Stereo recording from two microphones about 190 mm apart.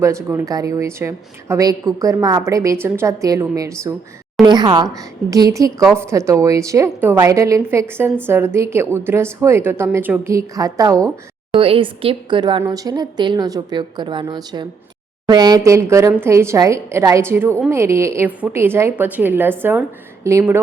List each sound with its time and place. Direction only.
0.0 s a woman's voice: 15° right (ahead or behind)